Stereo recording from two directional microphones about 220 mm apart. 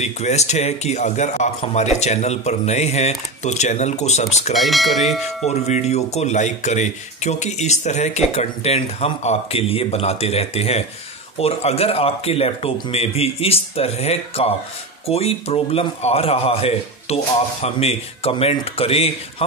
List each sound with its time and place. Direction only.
0.0 s a man's voice: 30° left (ahead or behind)
4.6 s speech: centre (ahead or behind)
5.5 s a man's voice: 30° left (ahead or behind)